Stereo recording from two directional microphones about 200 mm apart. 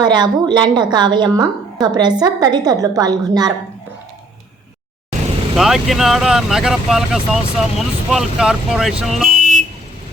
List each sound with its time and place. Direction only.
0.0 s a woman's voice: 20° right (ahead or behind)
5.5 s speech: centre (ahead or behind)
9.4 s vehicle: 40° right (ahead or behind)